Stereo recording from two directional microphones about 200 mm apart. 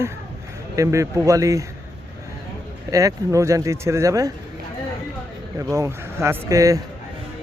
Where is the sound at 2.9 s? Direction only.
15° right (ahead or behind).